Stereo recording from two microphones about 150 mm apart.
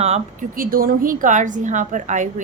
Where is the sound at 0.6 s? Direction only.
70° right (ahead or behind); by 2.3 s 55° right (ahead or behind).